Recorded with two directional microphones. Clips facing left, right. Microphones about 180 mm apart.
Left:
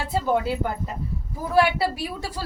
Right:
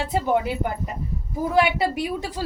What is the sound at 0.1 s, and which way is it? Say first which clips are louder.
Speech: even; 20° right (ahead or behind).